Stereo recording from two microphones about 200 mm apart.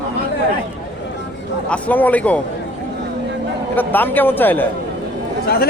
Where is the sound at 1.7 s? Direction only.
10° left (ahead or behind).